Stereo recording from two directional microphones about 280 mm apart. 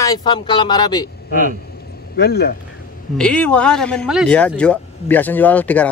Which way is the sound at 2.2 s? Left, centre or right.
Left.